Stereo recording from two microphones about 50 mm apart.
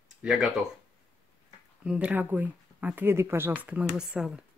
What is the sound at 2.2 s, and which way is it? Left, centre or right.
Speech, right.